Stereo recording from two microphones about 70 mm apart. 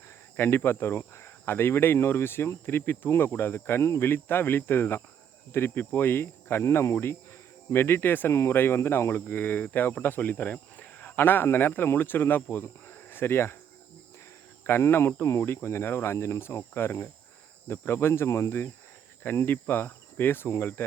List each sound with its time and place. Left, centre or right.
0.3 s speech: left
14.6 s speech: left
19.2 s speech: left